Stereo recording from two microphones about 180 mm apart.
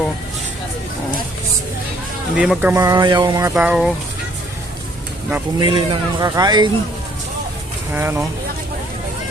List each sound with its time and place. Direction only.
2.3 s speech: 5° right (ahead or behind); by 3.5 s 20° right (ahead or behind)
3.5 s speech: 5° right (ahead or behind)
5.5 s speech: 30° right (ahead or behind)
7.9 s speech: 15° right (ahead or behind)